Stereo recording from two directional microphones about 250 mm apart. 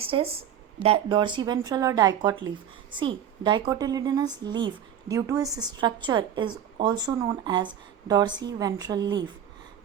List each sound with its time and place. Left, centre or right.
0.0 s a woman's voice: right